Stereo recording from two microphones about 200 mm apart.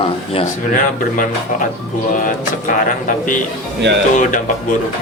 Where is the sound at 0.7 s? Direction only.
40° left (ahead or behind).